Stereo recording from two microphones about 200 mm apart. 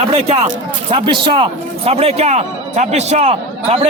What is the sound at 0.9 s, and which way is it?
Speech, 25° right (ahead or behind).